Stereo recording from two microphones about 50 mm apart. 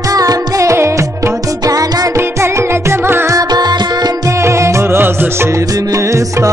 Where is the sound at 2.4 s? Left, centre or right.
Right.